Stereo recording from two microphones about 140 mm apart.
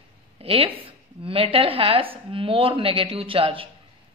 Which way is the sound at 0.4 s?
45° right (ahead or behind).